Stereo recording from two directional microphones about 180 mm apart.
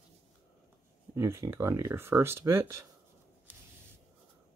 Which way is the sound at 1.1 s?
15° right (ahead or behind).